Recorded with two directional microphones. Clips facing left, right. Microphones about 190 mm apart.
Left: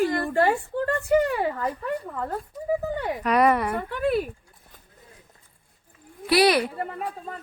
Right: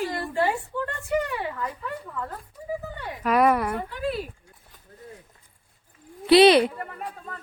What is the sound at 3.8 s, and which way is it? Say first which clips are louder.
Speech: left 5 dB; 60° left (ahead or behind).